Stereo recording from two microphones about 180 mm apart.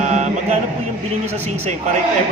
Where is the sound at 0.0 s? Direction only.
40° right (ahead or behind).